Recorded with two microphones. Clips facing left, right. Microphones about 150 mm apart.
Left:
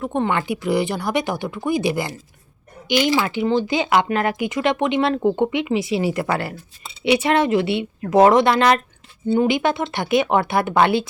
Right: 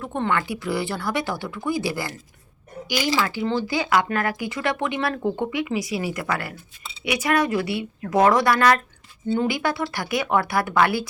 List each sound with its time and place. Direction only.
0.0 s speech: 20° left (ahead or behind)